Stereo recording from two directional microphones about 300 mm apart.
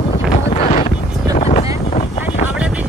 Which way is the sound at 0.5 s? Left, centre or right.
Left.